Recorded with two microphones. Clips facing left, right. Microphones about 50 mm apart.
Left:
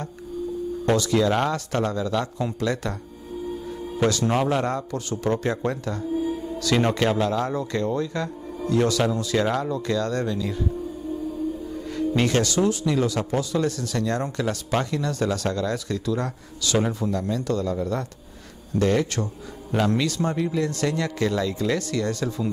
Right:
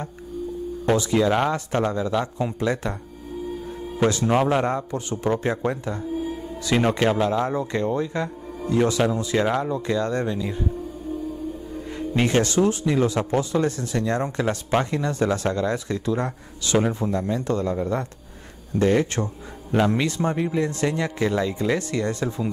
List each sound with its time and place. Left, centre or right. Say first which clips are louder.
0.9 s speech: right 1 dB; right
4.3 s speech: right 2 dB; centre
6.8 s speech: right 2 dB; centre; by 10.7 s right
11.7 s music: left 3 dB; right
12.1 s speech: right 2 dB; right